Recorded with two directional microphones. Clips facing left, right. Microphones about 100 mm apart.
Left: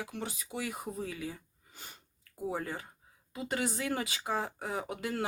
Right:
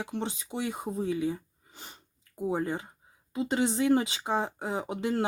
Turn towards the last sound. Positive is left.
turn(degrees=-25)  # may be behind; listen again after turning